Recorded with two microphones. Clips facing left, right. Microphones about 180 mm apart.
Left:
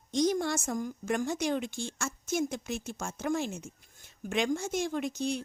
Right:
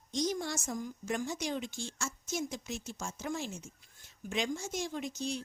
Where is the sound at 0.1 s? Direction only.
60° left (ahead or behind).